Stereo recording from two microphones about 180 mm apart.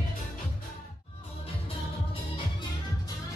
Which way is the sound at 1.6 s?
25° left (ahead or behind).